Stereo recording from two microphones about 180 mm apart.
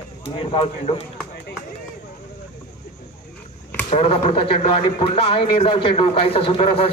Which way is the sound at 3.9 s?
35° left (ahead or behind).